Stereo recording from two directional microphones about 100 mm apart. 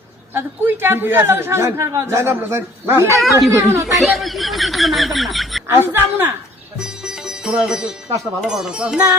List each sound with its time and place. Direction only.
0.3 s a man's voice: 20° right (ahead or behind)
3.9 s speech: centre (ahead or behind)
5.6 s a man's voice: 25° right (ahead or behind)
6.7 s sitar: 5° right (ahead or behind)
8.2 s speech: 5° right (ahead or behind)